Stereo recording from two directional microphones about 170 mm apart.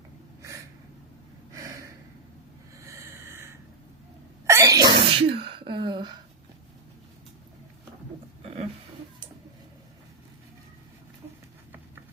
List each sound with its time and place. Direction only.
1.5 s gasp: 20° right (ahead or behind)
2.7 s snort: 15° right (ahead or behind)
4.4 s sneeze: 15° right (ahead or behind)
5.0 s sneeze: 35° right (ahead or behind)